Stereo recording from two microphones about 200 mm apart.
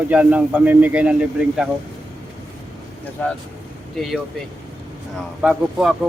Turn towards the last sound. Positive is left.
turn(degrees=-5)  # may be behind; listen again after turning